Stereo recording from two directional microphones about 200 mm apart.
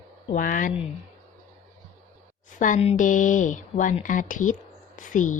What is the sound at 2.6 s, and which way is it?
A woman's voice, 35° left (ahead or behind).